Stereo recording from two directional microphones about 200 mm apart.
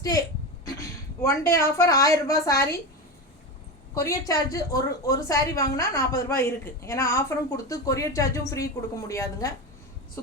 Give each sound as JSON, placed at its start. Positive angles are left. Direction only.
{"t": 0.0, "sound": "a woman's voice", "side_deg": 20}
{"t": 3.9, "sound": "a woman's voice", "side_deg": 15}